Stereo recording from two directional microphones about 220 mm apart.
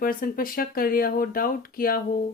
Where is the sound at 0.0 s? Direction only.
40° left (ahead or behind).